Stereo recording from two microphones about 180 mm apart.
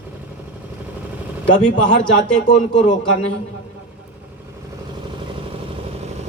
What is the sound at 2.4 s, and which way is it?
Speech, 40° left (ahead or behind).